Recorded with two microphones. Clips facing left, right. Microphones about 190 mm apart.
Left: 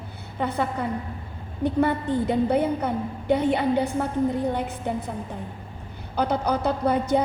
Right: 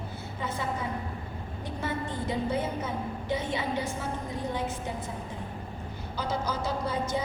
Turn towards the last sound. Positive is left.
turn(degrees=60)  # may be behind; listen again after turning